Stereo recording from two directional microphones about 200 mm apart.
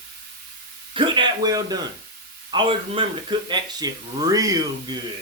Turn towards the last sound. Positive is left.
turn(degrees=-20)  # may be behind; listen again after turning